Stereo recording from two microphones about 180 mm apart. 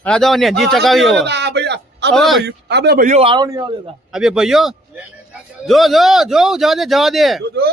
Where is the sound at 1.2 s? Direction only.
70° right (ahead or behind).